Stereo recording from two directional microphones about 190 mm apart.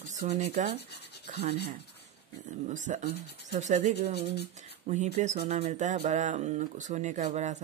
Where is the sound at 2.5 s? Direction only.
40° right (ahead or behind).